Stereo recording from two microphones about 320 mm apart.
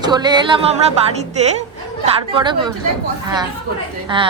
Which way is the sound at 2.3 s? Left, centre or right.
Centre.